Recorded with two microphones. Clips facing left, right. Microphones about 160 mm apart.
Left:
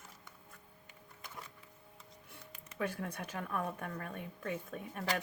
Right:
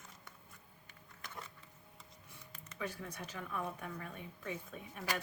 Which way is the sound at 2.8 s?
55° left (ahead or behind).